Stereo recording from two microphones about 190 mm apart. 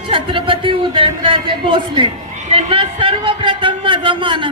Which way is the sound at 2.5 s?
30° right (ahead or behind).